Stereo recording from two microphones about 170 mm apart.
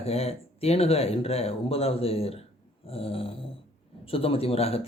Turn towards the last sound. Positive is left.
turn(degrees=35)  # may be behind; listen again after turning